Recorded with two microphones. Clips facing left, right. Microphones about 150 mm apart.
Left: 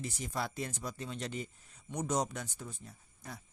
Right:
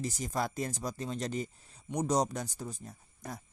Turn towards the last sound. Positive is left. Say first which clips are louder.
# right 5 dB
turn(degrees=-40)  # may be behind; listen again after turning